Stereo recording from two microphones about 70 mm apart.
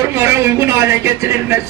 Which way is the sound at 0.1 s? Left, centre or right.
Right.